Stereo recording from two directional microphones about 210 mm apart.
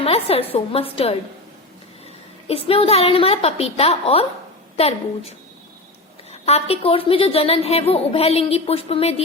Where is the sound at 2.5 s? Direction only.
25° left (ahead or behind).